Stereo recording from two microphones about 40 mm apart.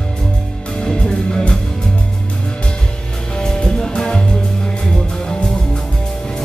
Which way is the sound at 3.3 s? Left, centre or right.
Centre.